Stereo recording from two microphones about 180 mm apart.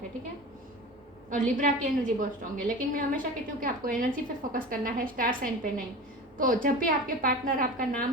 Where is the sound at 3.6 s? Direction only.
50° right (ahead or behind).